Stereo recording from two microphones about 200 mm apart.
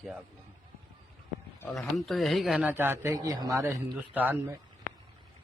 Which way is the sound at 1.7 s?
Centre (ahead or behind).